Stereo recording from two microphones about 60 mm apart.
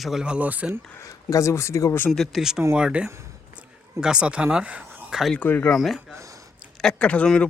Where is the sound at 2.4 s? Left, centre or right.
Centre.